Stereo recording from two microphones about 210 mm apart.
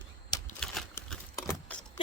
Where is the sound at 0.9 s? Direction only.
10° left (ahead or behind).